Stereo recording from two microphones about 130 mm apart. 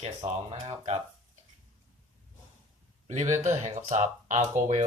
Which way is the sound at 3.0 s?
70° right (ahead or behind).